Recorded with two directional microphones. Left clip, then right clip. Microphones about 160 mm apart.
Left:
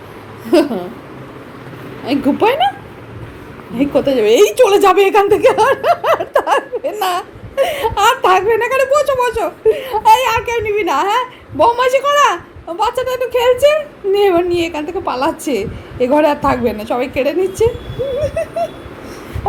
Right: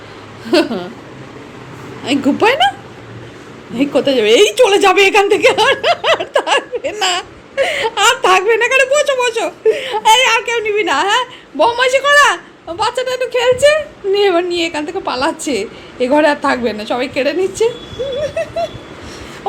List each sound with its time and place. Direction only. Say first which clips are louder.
0.5 s speech: left 1 dB; 5° left (ahead or behind)
2.0 s speech: right 1 dB; 5° right (ahead or behind)
3.8 s speech: even; 5° right (ahead or behind)
18.2 s a sound: even; centre (ahead or behind)